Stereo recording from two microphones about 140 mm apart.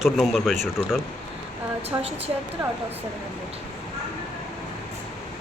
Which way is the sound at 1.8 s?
45° right (ahead or behind).